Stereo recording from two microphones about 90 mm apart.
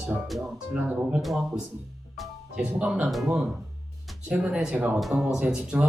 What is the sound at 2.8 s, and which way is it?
Speech, 15° right (ahead or behind).